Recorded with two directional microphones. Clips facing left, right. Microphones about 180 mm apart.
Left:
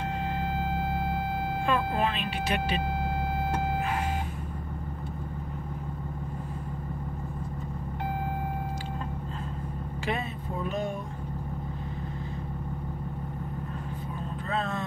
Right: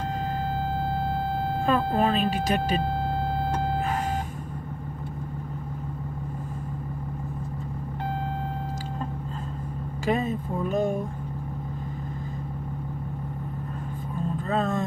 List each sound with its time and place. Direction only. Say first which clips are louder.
1.7 s vehicle: right 5 dB; 40° right (ahead or behind)
10.7 s vehicle: right 7 dB; 45° right (ahead or behind)
14.5 s vehicle: right 5 dB; 45° right (ahead or behind)